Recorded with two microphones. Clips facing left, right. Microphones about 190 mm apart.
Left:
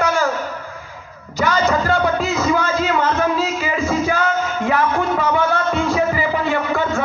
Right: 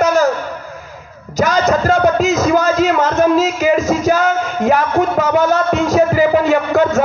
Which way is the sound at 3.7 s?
40° right (ahead or behind).